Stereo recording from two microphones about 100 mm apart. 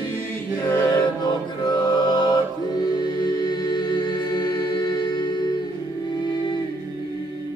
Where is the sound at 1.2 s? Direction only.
45° left (ahead or behind).